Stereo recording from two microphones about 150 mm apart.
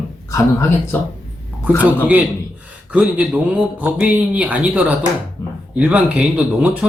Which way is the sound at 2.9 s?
5° right (ahead or behind).